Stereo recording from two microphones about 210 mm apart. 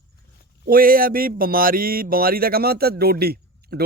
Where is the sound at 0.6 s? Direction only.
45° right (ahead or behind).